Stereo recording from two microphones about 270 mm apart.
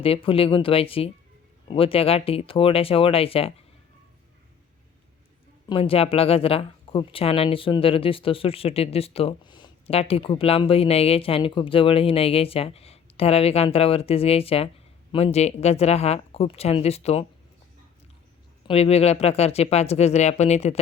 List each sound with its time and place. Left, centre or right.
0.0 s speech: left
5.6 s speech: centre
18.7 s speech: left